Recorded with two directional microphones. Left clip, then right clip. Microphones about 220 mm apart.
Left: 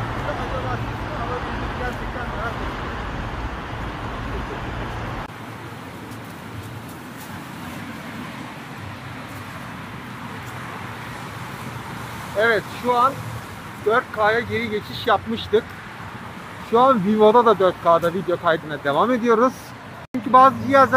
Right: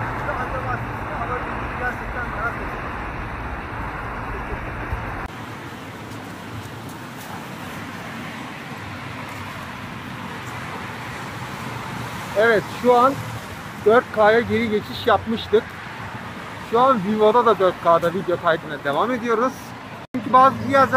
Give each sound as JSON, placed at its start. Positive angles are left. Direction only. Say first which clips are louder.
{"t": 12.4, "sound": "speech", "louder": "right 2 dB", "side_deg": -10}
{"t": 16.7, "sound": "speech", "louder": "left 1 dB", "side_deg": 5}